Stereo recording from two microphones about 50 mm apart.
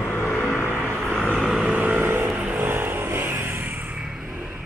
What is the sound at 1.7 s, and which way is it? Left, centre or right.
Vehicle, right.